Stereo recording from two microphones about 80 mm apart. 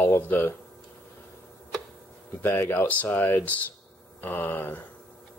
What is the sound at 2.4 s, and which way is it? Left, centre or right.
Speech, left.